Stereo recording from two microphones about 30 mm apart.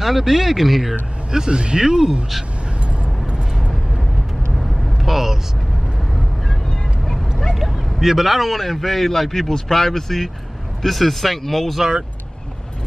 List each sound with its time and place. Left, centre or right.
0.0 s a man's voice: centre
1.5 s speech: right
4.6 s vehicle: centre
7.1 s vehicle: centre
8.0 s a man's voice: centre